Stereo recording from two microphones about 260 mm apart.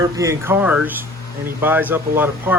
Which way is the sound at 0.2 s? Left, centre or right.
Centre.